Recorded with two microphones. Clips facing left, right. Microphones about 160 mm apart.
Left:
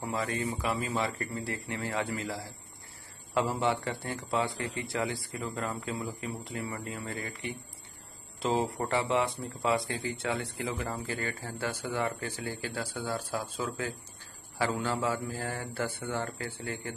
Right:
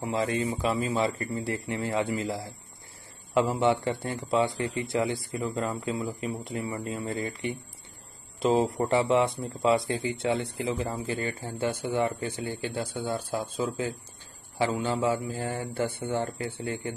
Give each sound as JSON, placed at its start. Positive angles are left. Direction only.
{"t": 0.1, "sound": "speech", "side_deg": -25}